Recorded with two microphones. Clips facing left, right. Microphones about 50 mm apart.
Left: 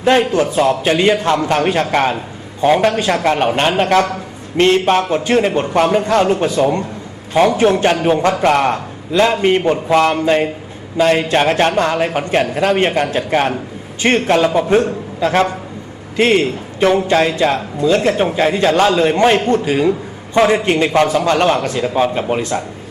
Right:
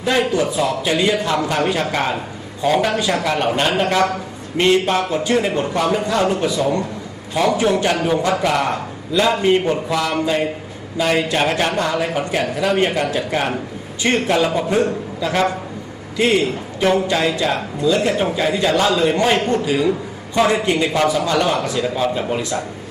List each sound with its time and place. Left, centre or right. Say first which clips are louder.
0.0 s a man's voice: left 5 dB; left
4.5 s a man's voice: left 3 dB; left